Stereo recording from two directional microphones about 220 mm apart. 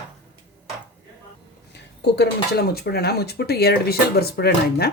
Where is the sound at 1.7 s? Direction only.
50° left (ahead or behind).